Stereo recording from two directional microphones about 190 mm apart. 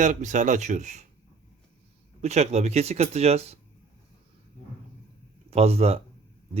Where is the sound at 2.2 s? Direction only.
35° right (ahead or behind).